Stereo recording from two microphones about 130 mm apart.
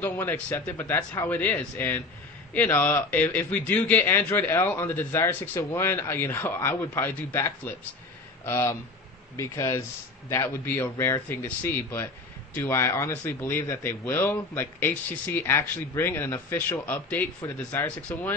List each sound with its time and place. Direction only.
0.2 s a man's voice: 15° left (ahead or behind)